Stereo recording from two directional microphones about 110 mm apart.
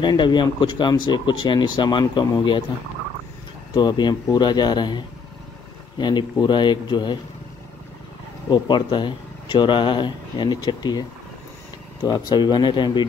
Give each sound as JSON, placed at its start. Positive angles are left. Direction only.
{"t": 0.0, "sound": "speech", "side_deg": 40}
{"t": 3.7, "sound": "speech", "side_deg": 40}
{"t": 8.5, "sound": "speech", "side_deg": 45}